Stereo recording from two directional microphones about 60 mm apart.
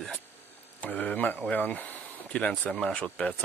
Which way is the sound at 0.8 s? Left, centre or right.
Left.